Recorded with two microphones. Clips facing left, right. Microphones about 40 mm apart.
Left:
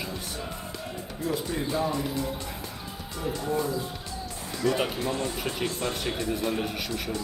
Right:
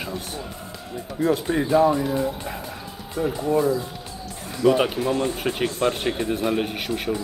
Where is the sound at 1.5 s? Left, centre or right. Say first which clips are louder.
Right 8 dB; right.